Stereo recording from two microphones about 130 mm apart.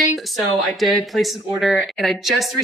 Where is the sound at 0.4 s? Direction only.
Centre (ahead or behind).